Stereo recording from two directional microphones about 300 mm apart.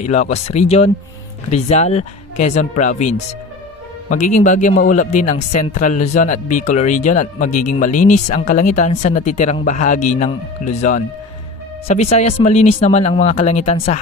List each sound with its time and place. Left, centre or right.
0.0 s a man's voice: left